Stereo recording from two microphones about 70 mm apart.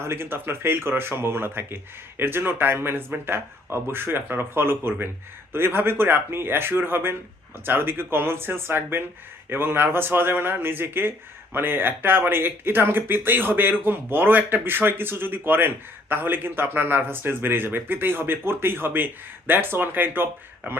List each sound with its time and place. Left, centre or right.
0.0 s speech: right